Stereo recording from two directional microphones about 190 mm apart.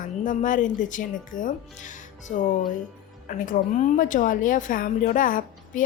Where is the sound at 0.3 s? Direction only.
45° left (ahead or behind).